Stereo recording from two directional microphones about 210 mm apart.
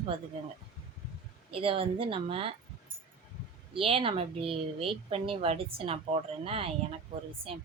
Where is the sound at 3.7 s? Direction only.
25° right (ahead or behind).